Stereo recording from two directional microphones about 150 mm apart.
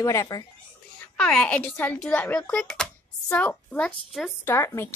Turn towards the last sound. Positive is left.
turn(degrees=15)  # may be behind; listen again after turning